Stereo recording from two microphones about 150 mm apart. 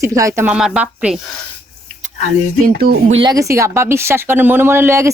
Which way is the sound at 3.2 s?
25° right (ahead or behind).